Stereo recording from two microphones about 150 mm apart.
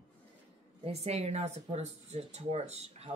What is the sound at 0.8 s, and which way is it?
Speech, 45° right (ahead or behind).